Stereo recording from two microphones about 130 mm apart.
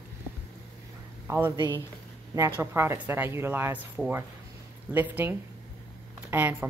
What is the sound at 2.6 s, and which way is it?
Speech, 20° right (ahead or behind).